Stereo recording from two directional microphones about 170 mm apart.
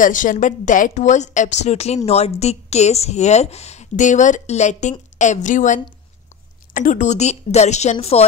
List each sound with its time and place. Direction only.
0.0 s a woman's voice: 50° left (ahead or behind)